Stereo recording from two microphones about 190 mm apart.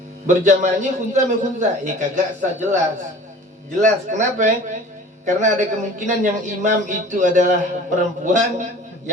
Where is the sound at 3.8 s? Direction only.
40° right (ahead or behind).